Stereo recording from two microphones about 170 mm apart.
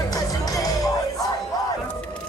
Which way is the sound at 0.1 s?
20° left (ahead or behind).